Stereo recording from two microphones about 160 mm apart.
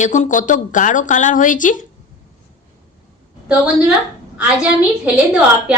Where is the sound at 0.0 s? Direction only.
50° left (ahead or behind).